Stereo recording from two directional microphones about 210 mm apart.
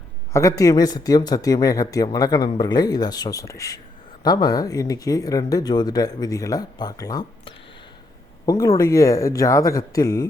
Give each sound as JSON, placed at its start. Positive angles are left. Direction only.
{"t": 0.3, "sound": "speech", "side_deg": 15}